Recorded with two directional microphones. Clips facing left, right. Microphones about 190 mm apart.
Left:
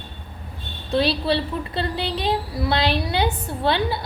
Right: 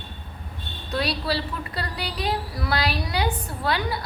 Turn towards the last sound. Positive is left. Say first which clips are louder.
# left 4 dB
turn(degrees=25)  # may be behind; listen again after turning